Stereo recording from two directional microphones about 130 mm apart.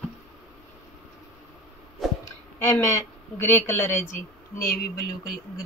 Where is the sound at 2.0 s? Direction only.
Centre (ahead or behind).